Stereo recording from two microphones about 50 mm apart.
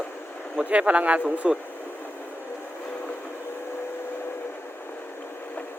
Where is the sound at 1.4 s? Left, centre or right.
Centre.